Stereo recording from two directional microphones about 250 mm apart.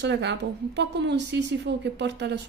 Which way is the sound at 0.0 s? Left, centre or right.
Right.